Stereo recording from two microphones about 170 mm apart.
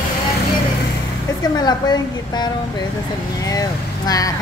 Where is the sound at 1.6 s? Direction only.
25° left (ahead or behind).